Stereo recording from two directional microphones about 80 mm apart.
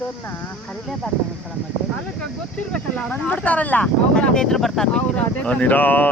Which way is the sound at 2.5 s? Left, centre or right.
Centre.